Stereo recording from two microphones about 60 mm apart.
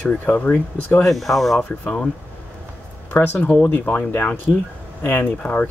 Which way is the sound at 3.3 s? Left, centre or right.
Centre.